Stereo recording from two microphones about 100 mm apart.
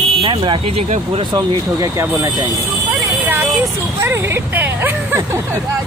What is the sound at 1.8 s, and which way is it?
Speech, 25° right (ahead or behind).